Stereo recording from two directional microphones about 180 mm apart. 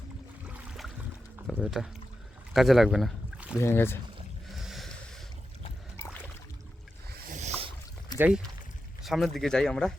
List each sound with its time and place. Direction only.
0.4 s boat: 5° right (ahead or behind)
1.5 s speech: 5° right (ahead or behind)
3.6 s speech: 15° left (ahead or behind)
4.4 s a sound: centre (ahead or behind)
7.3 s rowboat: 40° right (ahead or behind)
9.0 s speech: centre (ahead or behind)